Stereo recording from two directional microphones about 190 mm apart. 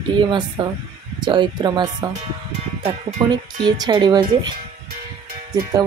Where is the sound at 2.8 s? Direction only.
35° right (ahead or behind).